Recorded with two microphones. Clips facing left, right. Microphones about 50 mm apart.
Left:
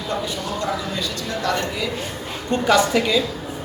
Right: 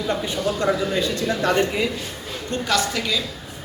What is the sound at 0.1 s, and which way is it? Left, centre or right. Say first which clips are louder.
A man's voice: right 1 dB; right.